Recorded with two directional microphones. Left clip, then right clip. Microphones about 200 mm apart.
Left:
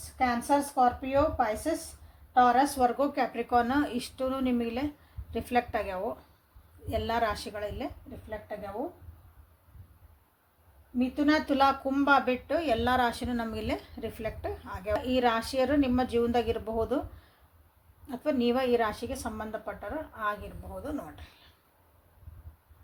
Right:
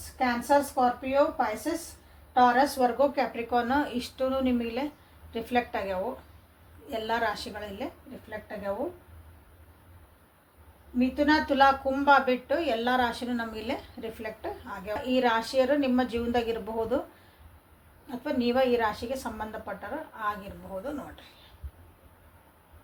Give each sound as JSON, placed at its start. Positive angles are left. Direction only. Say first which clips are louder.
{"t": 0.2, "sound": "a woman's voice", "louder": "right 2 dB", "side_deg": 55}
{"t": 10.9, "sound": "speech", "louder": "right 2 dB", "side_deg": 55}
{"t": 18.2, "sound": "a woman's voice", "louder": "right 2 dB", "side_deg": 55}